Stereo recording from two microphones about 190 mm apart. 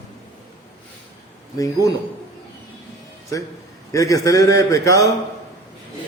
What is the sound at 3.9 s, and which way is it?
A man's voice, 15° left (ahead or behind).